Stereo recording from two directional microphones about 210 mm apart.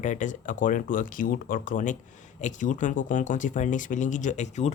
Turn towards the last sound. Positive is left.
turn(degrees=35)  # may be behind; listen again after turning